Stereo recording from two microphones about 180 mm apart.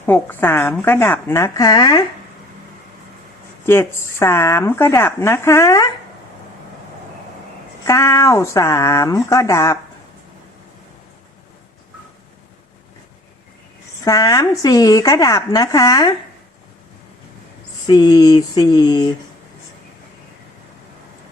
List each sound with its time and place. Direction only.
0.0 s speech: 10° left (ahead or behind)
3.7 s speech: 15° left (ahead or behind)
7.9 s speech: 15° left (ahead or behind)
14.0 s a woman's voice: 20° left (ahead or behind)
17.8 s a woman's voice: 25° left (ahead or behind)